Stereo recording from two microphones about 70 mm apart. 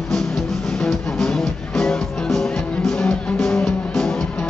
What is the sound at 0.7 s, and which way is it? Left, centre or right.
Music, centre.